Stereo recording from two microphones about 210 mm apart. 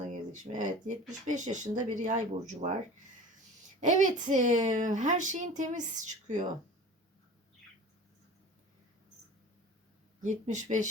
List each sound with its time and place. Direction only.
0.0 s speech: 35° right (ahead or behind)
3.8 s speech: 35° right (ahead or behind)
10.2 s speech: 35° right (ahead or behind)